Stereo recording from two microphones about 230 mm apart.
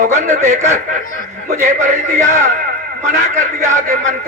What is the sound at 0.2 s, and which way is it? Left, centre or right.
Speech, right.